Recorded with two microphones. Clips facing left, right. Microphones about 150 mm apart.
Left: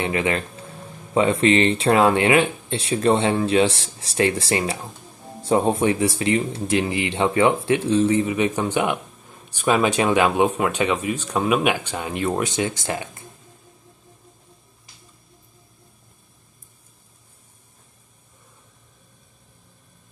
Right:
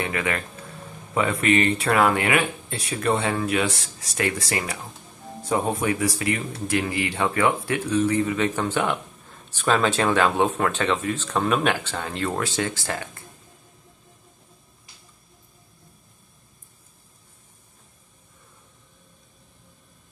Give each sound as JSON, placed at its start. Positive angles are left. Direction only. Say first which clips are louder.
{"t": 0.0, "sound": "speech", "louder": "left 4 dB", "side_deg": 25}